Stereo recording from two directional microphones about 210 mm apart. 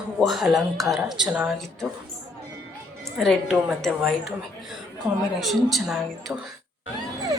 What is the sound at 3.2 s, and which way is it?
Speech, centre (ahead or behind).